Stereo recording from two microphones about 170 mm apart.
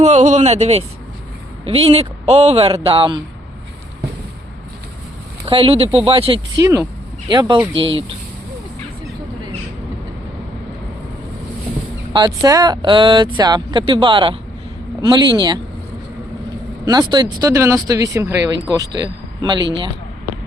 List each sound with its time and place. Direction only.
0.0 s speech: 45° right (ahead or behind)
5.5 s speech: 35° right (ahead or behind)
6.6 s speech: 20° right (ahead or behind)
12.1 s speech: 25° right (ahead or behind)
16.8 s speech: 20° right (ahead or behind)
19.0 s a sound: 25° right (ahead or behind)